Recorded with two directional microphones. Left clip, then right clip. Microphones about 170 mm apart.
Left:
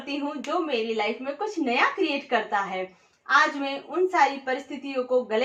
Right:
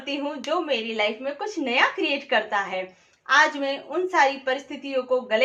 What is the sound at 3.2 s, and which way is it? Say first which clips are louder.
A woman's voice: right 2 dB; 25° left (ahead or behind).